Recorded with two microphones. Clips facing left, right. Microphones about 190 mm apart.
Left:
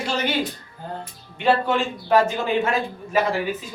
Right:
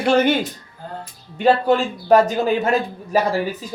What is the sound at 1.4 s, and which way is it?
A man's voice, 40° right (ahead or behind).